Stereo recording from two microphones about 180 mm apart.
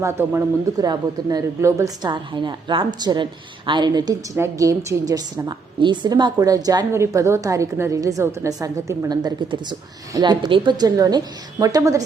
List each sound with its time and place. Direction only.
0.0 s a woman's voice: 15° right (ahead or behind)